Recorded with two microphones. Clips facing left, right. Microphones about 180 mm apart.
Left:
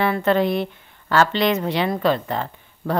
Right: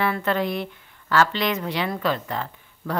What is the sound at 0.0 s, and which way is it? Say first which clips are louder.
Speech: left 5 dB; 25° left (ahead or behind).